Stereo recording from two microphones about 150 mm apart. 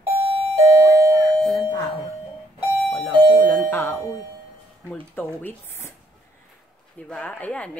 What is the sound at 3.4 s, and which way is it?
Speech, 65° right (ahead or behind).